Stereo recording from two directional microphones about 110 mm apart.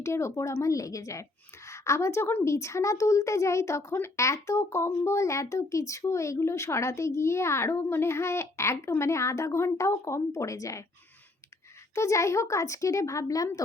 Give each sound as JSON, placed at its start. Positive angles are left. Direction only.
{"t": 0.0, "sound": "speech", "side_deg": 25}
{"t": 11.9, "sound": "speech", "side_deg": 25}